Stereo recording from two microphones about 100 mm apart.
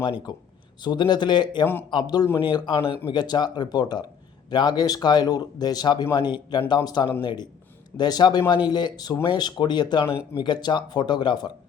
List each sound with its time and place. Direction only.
0.0 s speech: 50° left (ahead or behind)